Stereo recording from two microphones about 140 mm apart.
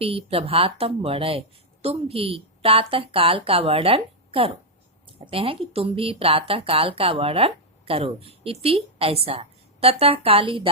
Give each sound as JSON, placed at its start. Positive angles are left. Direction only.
{"t": 0.0, "sound": "a woman's voice", "side_deg": -45}